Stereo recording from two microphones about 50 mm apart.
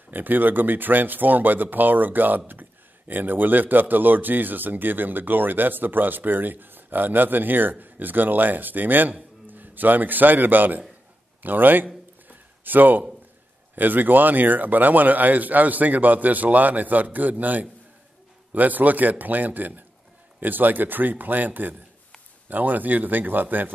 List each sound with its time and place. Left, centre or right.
0.1 s a man's voice: right
12.3 s a sound: right
13.7 s speech: right